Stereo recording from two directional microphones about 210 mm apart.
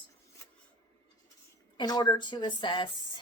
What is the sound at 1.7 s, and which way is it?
Speech, 20° left (ahead or behind).